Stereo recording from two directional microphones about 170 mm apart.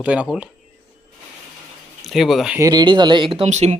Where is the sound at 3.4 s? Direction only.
45° right (ahead or behind).